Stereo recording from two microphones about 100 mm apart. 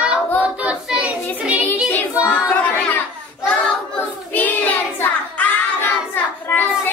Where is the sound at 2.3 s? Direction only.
15° left (ahead or behind).